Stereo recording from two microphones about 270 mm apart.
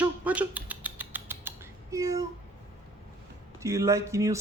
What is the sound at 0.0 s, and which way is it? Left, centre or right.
Rodents, centre.